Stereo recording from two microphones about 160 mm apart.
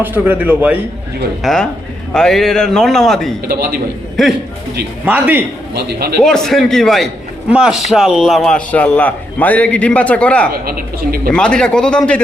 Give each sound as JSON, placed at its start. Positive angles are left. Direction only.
{"t": 0.0, "sound": "a man's voice", "side_deg": -10}
{"t": 1.4, "sound": "a man's voice", "side_deg": 0}
{"t": 3.4, "sound": "a woman's voice", "side_deg": -70}
{"t": 4.2, "sound": "a man's voice", "side_deg": 0}
{"t": 5.0, "sound": "a man's voice", "side_deg": -10}
{"t": 5.7, "sound": "speech", "side_deg": -90}
{"t": 6.2, "sound": "a man's voice", "side_deg": 5}
{"t": 10.5, "sound": "a woman's voice", "side_deg": -70}
{"t": 11.3, "sound": "a man's voice", "side_deg": 5}